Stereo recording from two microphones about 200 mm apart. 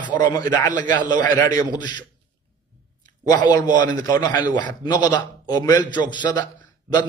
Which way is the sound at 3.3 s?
20° left (ahead or behind).